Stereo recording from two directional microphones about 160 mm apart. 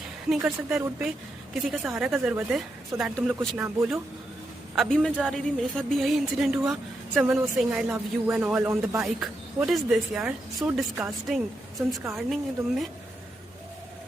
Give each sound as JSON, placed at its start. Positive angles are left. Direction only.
{"t": 0.3, "sound": "speech", "side_deg": -5}
{"t": 3.3, "sound": "speech", "side_deg": -15}
{"t": 4.7, "sound": "speech", "side_deg": 0}
{"t": 9.0, "sound": "speech", "side_deg": 0}